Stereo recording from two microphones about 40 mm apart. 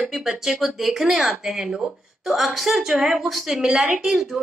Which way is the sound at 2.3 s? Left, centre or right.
Centre.